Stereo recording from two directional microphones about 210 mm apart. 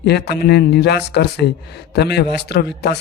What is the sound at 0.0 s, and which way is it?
Speech, 50° left (ahead or behind).